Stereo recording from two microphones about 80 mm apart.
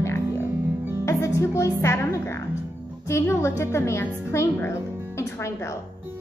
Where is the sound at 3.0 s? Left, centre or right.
Left.